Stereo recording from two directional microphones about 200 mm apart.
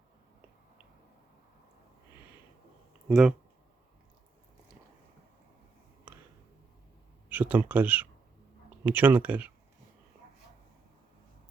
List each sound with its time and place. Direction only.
3.1 s speech: centre (ahead or behind)
7.3 s speech: 10° right (ahead or behind)